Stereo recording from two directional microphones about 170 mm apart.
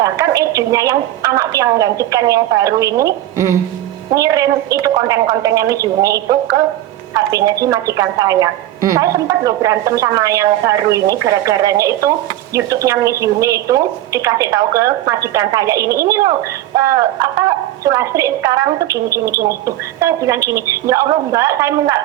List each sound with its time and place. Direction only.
0.0 s a woman's voice: 20° right (ahead or behind)